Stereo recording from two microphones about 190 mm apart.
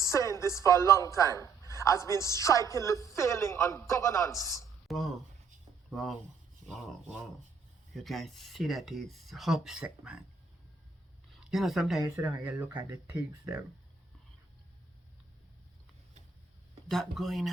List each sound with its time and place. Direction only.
0.0 s a woman's voice: 15° left (ahead or behind)
4.9 s speech: centre (ahead or behind)
7.9 s speech: centre (ahead or behind)
11.5 s speech: centre (ahead or behind)
16.9 s speech: centre (ahead or behind)